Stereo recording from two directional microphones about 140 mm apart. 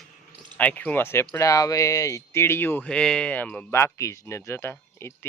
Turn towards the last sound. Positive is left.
turn(degrees=20)  # may be behind; listen again after turning